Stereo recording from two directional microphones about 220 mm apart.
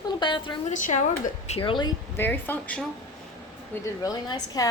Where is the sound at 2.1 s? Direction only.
10° left (ahead or behind).